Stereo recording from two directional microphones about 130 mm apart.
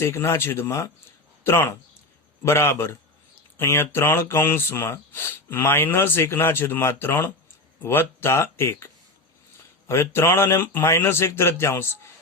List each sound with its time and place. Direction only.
0.0 s speech: 20° left (ahead or behind)